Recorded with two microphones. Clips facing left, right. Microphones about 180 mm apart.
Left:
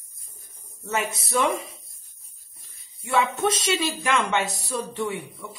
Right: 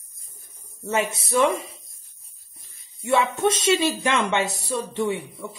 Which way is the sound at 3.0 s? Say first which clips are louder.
Right 2 dB; 25° right (ahead or behind).